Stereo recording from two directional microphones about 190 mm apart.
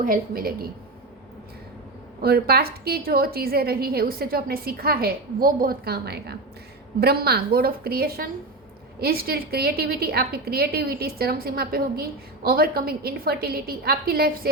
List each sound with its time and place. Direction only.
0.0 s a woman's voice: 50° right (ahead or behind)
2.2 s a woman's voice: 55° right (ahead or behind)